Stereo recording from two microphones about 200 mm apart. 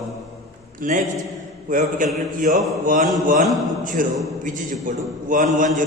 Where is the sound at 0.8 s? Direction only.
40° right (ahead or behind).